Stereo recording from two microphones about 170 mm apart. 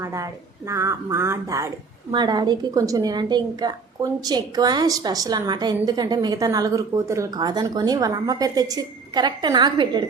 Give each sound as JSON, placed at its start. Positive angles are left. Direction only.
{"t": 0.0, "sound": "a woman's voice", "side_deg": -20}